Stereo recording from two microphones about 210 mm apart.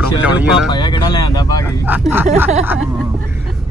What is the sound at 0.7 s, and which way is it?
Speech, 20° left (ahead or behind).